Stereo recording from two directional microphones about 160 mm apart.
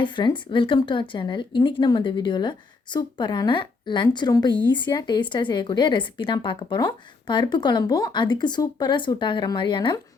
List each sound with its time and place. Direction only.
0.0 s speech: 30° left (ahead or behind)